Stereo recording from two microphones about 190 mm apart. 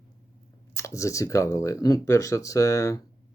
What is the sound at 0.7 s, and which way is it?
Speech, 15° left (ahead or behind).